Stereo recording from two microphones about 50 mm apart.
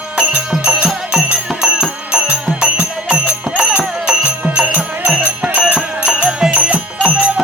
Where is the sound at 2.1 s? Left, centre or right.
Right.